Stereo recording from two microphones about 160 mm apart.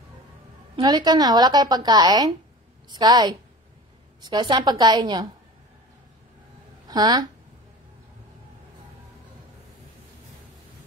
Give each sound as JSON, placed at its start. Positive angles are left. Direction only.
{"t": 0.7, "sound": "speech", "side_deg": -25}
{"t": 6.9, "sound": "speech", "side_deg": -25}